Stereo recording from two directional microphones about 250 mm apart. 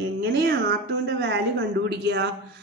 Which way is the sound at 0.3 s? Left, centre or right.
Right.